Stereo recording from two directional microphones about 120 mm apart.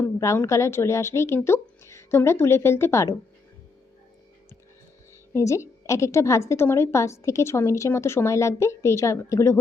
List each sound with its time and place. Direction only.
0.0 s a woman's voice: 20° left (ahead or behind)
5.3 s a woman's voice: 25° left (ahead or behind)